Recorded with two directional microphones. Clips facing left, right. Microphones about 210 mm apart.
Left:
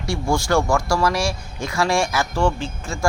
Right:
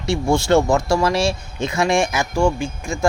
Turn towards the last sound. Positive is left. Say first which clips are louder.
# right 4 dB
turn(degrees=-15)  # may be behind; listen again after turning